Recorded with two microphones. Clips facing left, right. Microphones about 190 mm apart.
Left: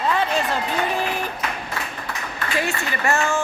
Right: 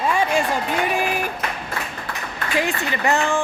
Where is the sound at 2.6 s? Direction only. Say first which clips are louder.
Right 3 dB; 15° right (ahead or behind).